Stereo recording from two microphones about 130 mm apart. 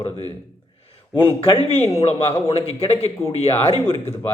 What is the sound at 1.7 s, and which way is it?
Speech, 55° left (ahead or behind).